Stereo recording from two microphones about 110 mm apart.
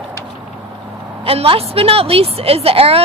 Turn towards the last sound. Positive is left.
turn(degrees=-60)  # may be behind; listen again after turning